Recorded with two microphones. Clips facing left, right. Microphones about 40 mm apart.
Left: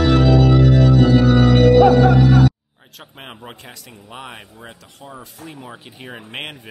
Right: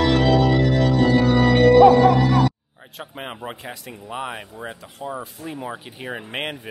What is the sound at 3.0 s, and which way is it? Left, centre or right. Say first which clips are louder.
Speech: right 4 dB; centre.